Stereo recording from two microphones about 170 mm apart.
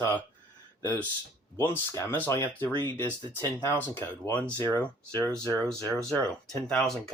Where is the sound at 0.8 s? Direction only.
10° left (ahead or behind).